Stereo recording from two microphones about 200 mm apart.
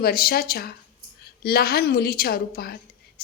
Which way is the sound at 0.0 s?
50° left (ahead or behind).